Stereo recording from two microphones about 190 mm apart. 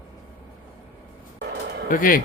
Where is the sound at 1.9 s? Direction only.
45° left (ahead or behind).